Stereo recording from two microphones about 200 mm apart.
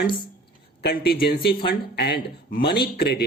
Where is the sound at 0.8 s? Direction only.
50° left (ahead or behind).